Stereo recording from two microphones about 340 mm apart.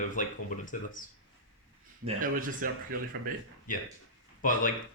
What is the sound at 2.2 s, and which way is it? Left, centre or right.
Speech, right.